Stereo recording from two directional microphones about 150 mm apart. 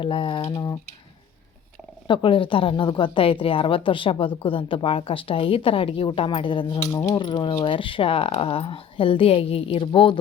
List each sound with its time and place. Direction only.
0.0 s speech: 35° left (ahead or behind)
2.0 s speech: 35° left (ahead or behind)